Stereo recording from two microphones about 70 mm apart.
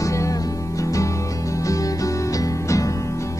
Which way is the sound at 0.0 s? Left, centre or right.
Left.